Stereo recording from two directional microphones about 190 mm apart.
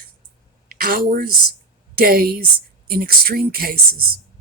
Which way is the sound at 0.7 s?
50° right (ahead or behind).